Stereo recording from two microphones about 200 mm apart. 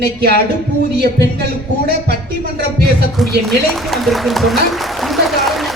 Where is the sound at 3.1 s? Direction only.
Centre (ahead or behind).